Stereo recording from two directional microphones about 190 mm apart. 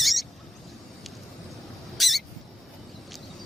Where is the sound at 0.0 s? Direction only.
Centre (ahead or behind).